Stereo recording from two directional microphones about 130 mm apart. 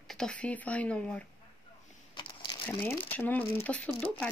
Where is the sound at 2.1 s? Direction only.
35° left (ahead or behind).